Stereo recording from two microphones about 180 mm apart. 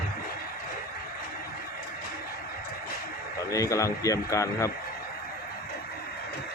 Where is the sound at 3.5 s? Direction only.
20° left (ahead or behind).